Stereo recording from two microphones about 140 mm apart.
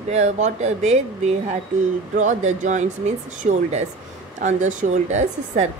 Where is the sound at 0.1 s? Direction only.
50° right (ahead or behind).